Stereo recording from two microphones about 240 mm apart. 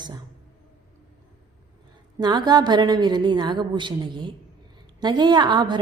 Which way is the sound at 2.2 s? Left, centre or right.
Centre.